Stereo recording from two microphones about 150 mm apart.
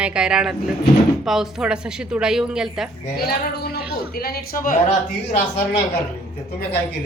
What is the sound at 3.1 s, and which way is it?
A man's voice, 90° left.